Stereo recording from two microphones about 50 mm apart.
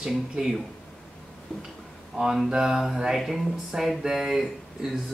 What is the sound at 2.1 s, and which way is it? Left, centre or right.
Speech, centre.